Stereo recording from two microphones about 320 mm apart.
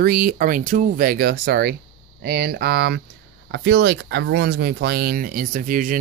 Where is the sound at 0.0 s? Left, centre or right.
Right.